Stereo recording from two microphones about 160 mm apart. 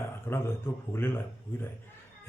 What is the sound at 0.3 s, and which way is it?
A man's voice, 15° left (ahead or behind).